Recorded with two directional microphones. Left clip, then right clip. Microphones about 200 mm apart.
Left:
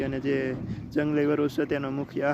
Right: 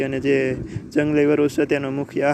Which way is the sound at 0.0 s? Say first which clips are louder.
Right 8 dB; 15° right (ahead or behind).